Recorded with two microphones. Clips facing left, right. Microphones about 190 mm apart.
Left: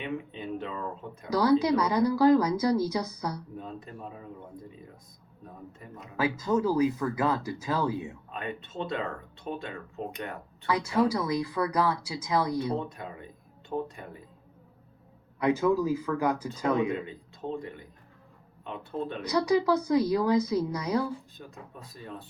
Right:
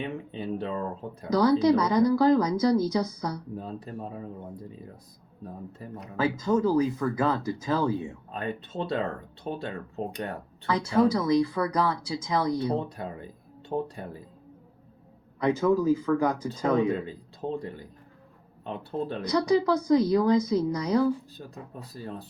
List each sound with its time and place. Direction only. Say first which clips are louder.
0.0 s speech: right 2 dB; 35° right (ahead or behind)
1.3 s speech: right 2 dB; 10° left (ahead or behind)
3.6 s speech: right 4 dB; 35° right (ahead or behind)
5.8 s speech: right 6 dB; 35° right (ahead or behind)
6.1 s speech: right 2 dB; 10° left (ahead or behind)
8.3 s speech: right 6 dB; 35° right (ahead or behind)
11.1 s speech: right 5 dB; 10° left (ahead or behind)
12.5 s speech: right 2 dB; 35° right (ahead or behind)
15.4 s speech: right 1 dB; 10° left (ahead or behind)
16.7 s speech: right 3 dB; 35° right (ahead or behind)
19.2 s speech: right 1 dB; 10° left (ahead or behind)
21.3 s speech: right 4 dB; 35° right (ahead or behind)